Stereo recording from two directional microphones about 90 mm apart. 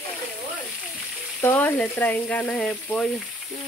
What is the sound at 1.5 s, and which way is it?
Speech, 20° left (ahead or behind).